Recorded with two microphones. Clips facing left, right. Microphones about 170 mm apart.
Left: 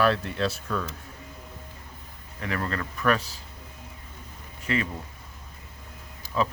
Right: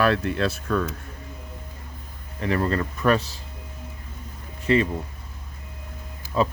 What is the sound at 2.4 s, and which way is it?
Speech, 30° right (ahead or behind).